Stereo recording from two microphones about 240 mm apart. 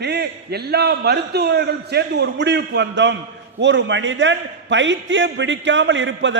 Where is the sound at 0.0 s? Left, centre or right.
Right.